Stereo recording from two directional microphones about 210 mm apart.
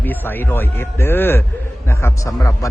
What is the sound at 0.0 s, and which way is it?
A man's voice, 10° left (ahead or behind).